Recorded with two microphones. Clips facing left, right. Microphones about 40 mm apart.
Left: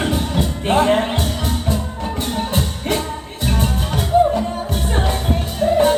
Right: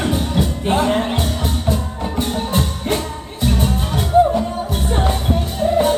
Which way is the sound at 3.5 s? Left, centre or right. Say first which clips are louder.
Left 2 dB; left.